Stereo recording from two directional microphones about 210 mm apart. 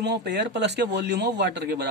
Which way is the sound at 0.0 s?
50° right (ahead or behind).